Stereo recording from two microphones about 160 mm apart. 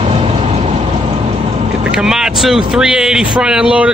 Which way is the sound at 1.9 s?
5° right (ahead or behind).